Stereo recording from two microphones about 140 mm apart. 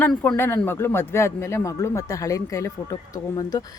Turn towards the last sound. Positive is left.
turn(degrees=25)  # may be behind; listen again after turning